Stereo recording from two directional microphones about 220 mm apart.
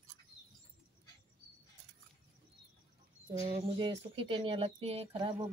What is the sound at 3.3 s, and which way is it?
Speech, 30° right (ahead or behind).